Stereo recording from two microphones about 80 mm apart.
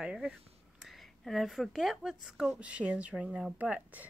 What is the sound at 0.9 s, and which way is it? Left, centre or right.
A woman's voice, centre.